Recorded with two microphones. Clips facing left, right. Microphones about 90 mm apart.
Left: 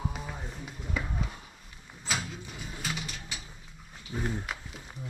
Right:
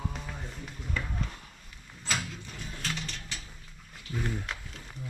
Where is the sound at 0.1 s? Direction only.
10° left (ahead or behind).